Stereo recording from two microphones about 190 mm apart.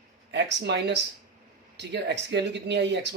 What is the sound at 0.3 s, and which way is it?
Speech, 65° right (ahead or behind).